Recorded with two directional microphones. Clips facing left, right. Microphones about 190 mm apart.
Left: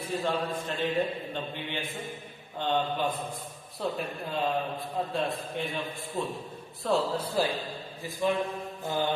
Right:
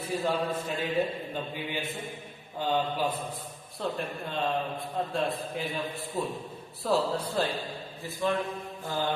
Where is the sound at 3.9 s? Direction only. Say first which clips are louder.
Left 1 dB; 5° left (ahead or behind).